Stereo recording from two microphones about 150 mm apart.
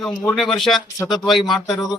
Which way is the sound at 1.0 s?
30° left (ahead or behind).